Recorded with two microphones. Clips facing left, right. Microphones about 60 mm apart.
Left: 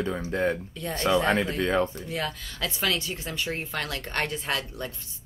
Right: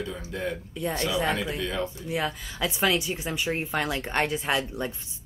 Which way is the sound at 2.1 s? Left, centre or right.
Centre.